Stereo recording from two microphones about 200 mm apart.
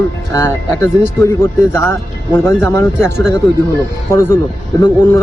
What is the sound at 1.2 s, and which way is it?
Speech, 15° left (ahead or behind).